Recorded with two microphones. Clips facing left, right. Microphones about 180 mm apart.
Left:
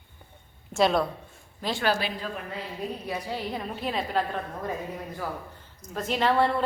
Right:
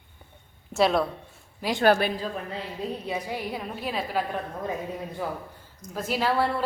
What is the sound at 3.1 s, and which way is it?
Speech, 15° right (ahead or behind).